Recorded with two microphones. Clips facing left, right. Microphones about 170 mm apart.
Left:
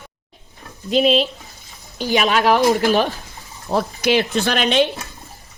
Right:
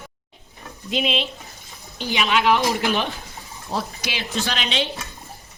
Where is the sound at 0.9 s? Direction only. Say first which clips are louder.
Left 8 dB; 40° left (ahead or behind).